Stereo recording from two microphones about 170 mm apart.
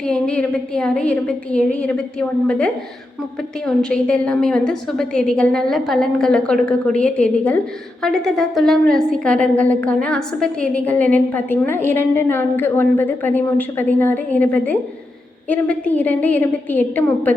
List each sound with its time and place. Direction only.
0.0 s a woman's voice: 5° left (ahead or behind)
3.8 s a woman's voice: 5° left (ahead or behind)